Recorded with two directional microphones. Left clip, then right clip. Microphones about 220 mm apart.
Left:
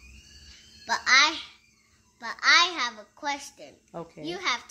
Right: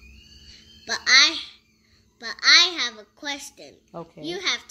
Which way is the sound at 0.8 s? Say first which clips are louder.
Right 3 dB; 5° left (ahead or behind).